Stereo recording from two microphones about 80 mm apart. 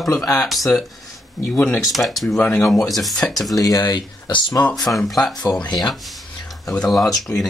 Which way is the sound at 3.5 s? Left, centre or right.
Left.